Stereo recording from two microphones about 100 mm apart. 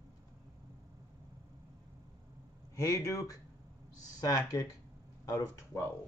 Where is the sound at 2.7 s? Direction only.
35° left (ahead or behind).